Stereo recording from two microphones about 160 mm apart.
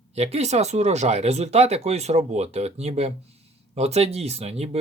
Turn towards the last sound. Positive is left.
turn(degrees=-40)  # may be behind; listen again after turning